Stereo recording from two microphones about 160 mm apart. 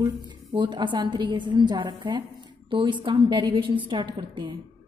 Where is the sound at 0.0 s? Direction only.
25° right (ahead or behind).